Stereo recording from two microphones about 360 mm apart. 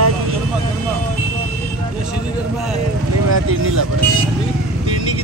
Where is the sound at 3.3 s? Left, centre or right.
Right.